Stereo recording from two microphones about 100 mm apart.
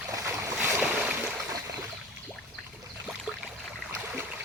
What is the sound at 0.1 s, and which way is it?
Boat, 30° right (ahead or behind).